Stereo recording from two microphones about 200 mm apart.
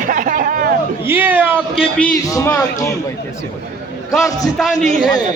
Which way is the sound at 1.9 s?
5° left (ahead or behind).